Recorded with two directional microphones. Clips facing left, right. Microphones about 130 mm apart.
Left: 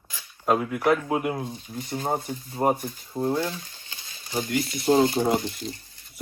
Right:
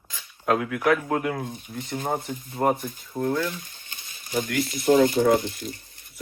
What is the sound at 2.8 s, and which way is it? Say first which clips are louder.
Speech: even; 50° right (ahead or behind).